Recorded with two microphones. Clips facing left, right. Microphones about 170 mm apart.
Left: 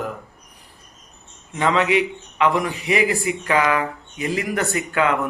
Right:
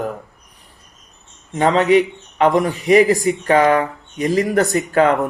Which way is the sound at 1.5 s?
40° right (ahead or behind).